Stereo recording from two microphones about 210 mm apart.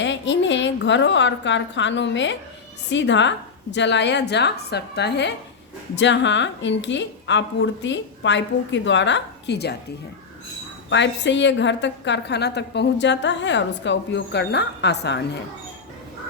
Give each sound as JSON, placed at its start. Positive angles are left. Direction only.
{"t": 0.0, "sound": "a woman's voice", "side_deg": 60}
{"t": 10.8, "sound": "a woman's voice", "side_deg": 60}